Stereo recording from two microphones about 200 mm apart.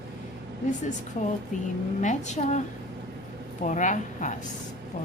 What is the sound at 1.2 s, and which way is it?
Speech, 35° left (ahead or behind).